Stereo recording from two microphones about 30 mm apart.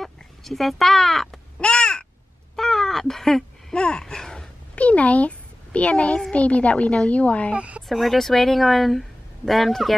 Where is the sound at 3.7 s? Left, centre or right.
Left.